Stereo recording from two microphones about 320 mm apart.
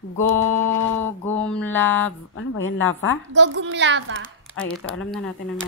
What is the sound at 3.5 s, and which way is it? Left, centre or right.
Speech, right.